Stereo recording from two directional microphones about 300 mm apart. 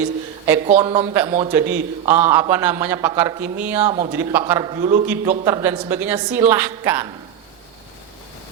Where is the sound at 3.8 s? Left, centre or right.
Centre.